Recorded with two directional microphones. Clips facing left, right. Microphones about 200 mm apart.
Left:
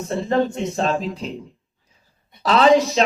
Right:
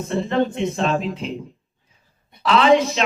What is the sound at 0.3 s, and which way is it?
Speech, 40° left (ahead or behind).